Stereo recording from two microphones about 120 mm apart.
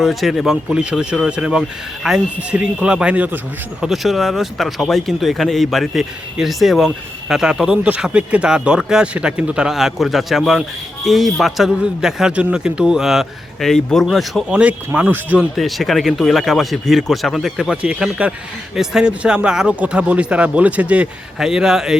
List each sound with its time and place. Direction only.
0.0 s speech: centre (ahead or behind)
3.8 s speech: centre (ahead or behind)
14.5 s speech: 10° right (ahead or behind)
15.5 s speech: centre (ahead or behind)